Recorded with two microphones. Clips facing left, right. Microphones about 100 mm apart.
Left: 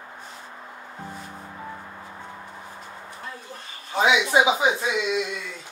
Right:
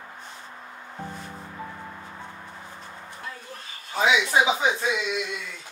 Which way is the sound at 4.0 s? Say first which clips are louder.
Left 2 dB; 20° left (ahead or behind).